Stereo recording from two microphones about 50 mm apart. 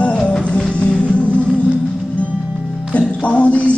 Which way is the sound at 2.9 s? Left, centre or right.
Left.